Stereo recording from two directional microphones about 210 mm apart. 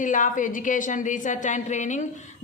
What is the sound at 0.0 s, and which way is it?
Speech, 40° left (ahead or behind).